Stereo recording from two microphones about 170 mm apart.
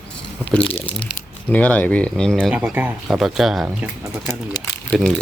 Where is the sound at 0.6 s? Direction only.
30° left (ahead or behind).